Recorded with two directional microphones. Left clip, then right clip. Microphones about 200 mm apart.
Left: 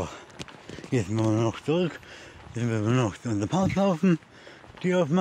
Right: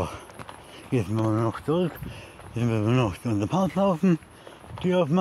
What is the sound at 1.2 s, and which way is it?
Speech, 20° left (ahead or behind).